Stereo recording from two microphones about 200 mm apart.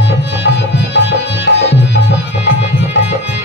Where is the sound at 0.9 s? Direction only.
60° left (ahead or behind).